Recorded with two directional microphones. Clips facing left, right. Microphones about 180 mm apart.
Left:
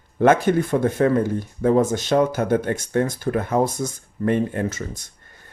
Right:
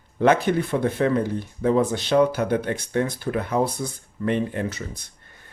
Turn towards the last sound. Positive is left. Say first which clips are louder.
# left 3 dB
turn(degrees=45)  # may be behind; listen again after turning